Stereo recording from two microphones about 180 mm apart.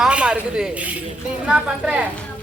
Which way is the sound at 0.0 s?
5° right (ahead or behind).